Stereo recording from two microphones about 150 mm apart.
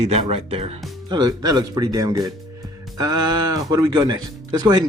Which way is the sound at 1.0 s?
25° right (ahead or behind).